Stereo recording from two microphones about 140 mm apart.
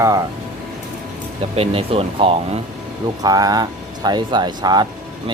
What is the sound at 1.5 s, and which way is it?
Speech, 45° right (ahead or behind).